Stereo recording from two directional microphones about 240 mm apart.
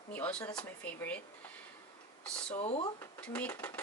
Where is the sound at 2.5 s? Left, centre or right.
Left.